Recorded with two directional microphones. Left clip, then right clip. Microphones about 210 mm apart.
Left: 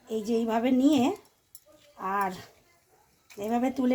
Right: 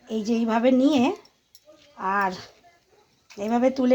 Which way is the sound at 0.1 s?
25° right (ahead or behind).